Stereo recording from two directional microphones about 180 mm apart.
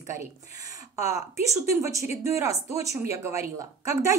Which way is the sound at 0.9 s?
15° right (ahead or behind).